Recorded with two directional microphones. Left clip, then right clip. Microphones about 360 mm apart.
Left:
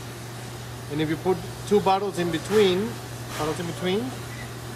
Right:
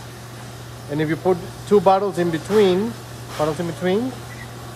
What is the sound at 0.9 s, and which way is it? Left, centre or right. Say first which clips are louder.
Speech: right 5 dB; centre.